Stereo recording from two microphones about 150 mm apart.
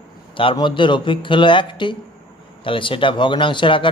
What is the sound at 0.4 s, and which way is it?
A man's voice, 35° left (ahead or behind).